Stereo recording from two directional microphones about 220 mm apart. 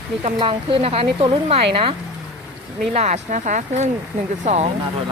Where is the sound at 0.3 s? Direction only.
25° right (ahead or behind).